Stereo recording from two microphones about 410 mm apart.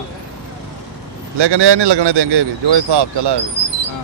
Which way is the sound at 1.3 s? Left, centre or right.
Right.